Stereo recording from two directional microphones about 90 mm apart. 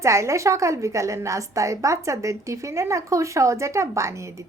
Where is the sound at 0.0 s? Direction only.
35° right (ahead or behind).